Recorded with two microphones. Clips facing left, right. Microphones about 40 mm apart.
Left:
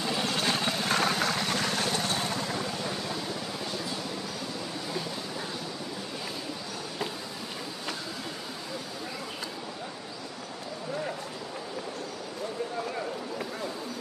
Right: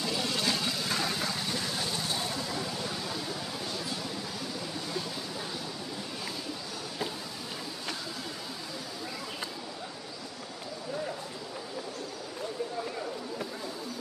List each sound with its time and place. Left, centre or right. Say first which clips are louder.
0.0 s vehicle: left 2 dB; left